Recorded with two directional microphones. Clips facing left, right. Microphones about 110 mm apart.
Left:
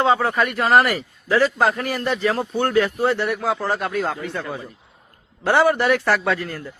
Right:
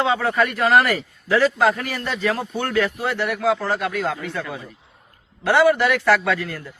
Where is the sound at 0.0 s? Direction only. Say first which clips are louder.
Left 3 dB; 35° left (ahead or behind).